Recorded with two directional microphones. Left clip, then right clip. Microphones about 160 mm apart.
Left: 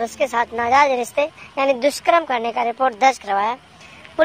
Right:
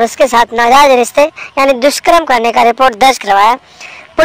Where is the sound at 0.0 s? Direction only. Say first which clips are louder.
Right 12 dB; 45° right (ahead or behind).